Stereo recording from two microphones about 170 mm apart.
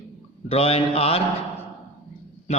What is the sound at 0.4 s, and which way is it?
Speech, 35° left (ahead or behind).